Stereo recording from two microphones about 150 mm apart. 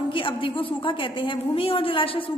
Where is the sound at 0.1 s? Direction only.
35° left (ahead or behind).